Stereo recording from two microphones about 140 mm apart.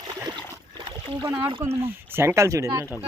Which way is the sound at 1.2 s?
20° right (ahead or behind).